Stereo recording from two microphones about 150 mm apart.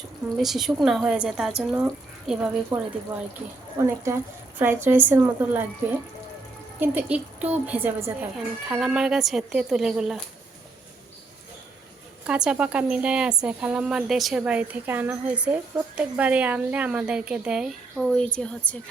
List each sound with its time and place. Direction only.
0.3 s a woman's voice: centre (ahead or behind)
2.7 s speech: 30° right (ahead or behind)
3.8 s a woman's voice: 20° right (ahead or behind)
6.7 s a woman's voice: 10° right (ahead or behind)
12.2 s a woman's voice: 5° right (ahead or behind)